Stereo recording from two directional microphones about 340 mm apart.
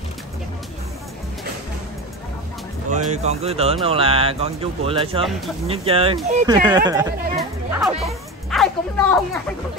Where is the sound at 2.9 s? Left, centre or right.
Centre.